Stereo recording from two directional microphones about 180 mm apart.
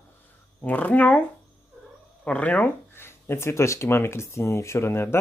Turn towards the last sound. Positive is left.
turn(degrees=15)  # may be behind; listen again after turning